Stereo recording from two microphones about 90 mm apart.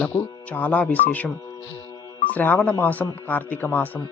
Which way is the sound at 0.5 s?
15° left (ahead or behind).